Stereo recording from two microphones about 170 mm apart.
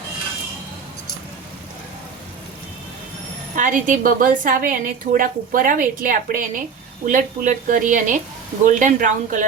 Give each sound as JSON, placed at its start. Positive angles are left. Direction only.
{"t": 3.5, "sound": "a woman's voice", "side_deg": -50}